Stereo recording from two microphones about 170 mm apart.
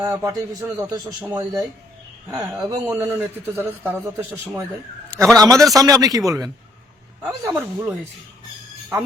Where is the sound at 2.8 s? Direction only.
15° right (ahead or behind).